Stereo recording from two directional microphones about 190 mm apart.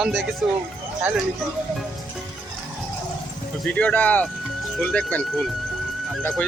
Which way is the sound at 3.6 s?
5° left (ahead or behind).